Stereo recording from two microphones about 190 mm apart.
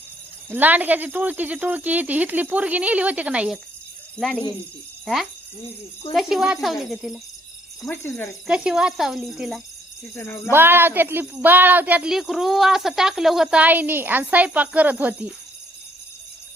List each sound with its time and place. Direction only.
0.5 s speech: 10° right (ahead or behind)
5.0 s speech: centre (ahead or behind)
7.9 s speech: 10° left (ahead or behind)
8.4 s speech: 5° right (ahead or behind)
10.2 s speech: 10° left (ahead or behind)
10.5 s speech: 10° right (ahead or behind)